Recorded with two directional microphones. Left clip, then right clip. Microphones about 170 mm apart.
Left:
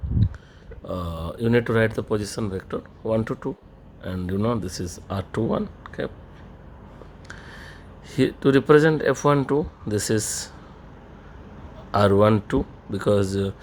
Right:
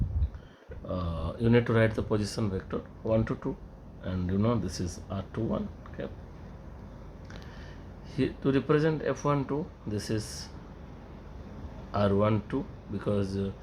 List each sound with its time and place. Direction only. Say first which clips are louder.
0.9 s speech: left 5 dB; 60° left (ahead or behind)
8.1 s speech: left 9 dB; 60° left (ahead or behind)
11.9 s speech: left 9 dB; 60° left (ahead or behind)